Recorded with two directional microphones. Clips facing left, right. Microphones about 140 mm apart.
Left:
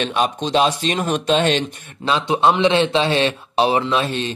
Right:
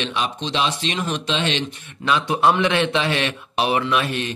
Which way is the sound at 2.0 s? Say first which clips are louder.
Left 2 dB; 30° left (ahead or behind).